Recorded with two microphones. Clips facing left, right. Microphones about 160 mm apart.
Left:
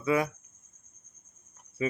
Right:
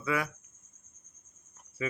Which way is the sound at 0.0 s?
25° left (ahead or behind).